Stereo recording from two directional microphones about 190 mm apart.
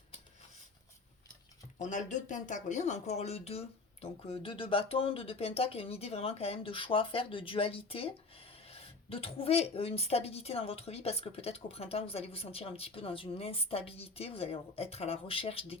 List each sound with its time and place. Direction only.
1.8 s speech: 40° left (ahead or behind)